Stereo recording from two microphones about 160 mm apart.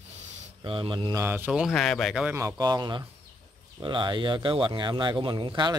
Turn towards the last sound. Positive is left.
turn(degrees=-30)  # may be behind; listen again after turning